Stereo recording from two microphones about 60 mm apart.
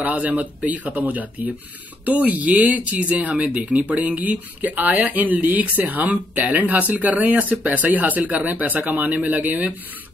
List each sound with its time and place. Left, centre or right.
0.0 s speech: right